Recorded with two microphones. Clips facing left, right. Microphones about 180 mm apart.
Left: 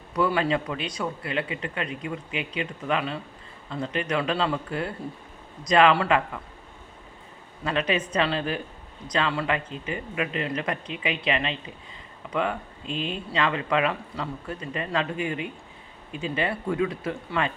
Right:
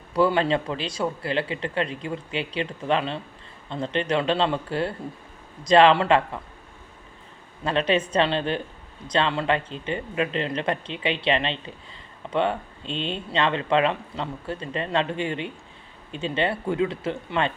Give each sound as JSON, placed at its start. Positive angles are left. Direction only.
{"t": 0.1, "sound": "a man's voice", "side_deg": -30}
{"t": 7.6, "sound": "speech", "side_deg": -30}